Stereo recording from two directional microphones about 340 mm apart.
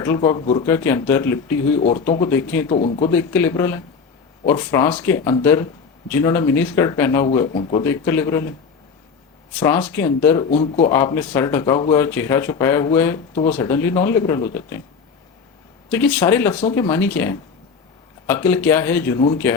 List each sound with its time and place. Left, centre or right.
0.0 s speech: centre
2.7 s speech: centre
3.1 s speech: centre
9.6 s speech: centre
15.9 s speech: centre